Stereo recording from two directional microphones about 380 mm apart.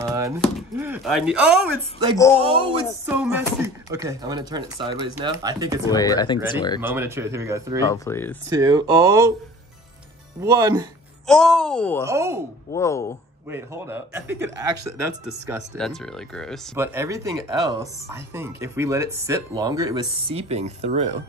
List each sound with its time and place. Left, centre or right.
0.0 s speech: centre
2.4 s speech: centre
5.9 s speech: centre
7.0 s speech: centre
7.9 s speech: centre
8.5 s speech: centre
10.4 s speech: centre
11.2 s speech: centre
12.7 s speech: centre
13.5 s speech: centre
15.3 s speech: right
15.7 s speech: centre